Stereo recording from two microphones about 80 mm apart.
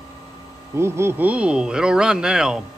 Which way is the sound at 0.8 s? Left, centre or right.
Right.